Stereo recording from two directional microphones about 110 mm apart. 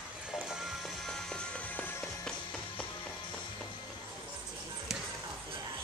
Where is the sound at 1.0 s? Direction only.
10° left (ahead or behind).